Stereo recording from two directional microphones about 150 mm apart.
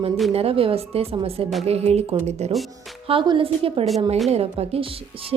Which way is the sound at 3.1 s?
35° right (ahead or behind).